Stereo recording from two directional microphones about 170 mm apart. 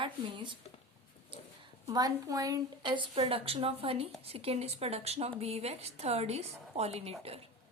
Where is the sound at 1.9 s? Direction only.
20° right (ahead or behind).